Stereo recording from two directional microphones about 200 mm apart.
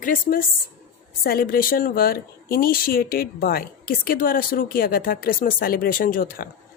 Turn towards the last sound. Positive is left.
turn(degrees=45)  # may be behind; listen again after turning